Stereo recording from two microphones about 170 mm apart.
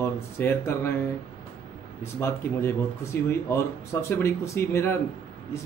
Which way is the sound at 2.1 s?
15° left (ahead or behind).